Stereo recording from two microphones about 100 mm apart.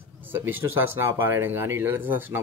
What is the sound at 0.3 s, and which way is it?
Speech, 20° right (ahead or behind).